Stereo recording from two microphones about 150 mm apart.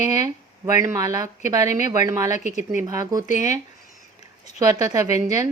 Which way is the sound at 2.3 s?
55° left (ahead or behind).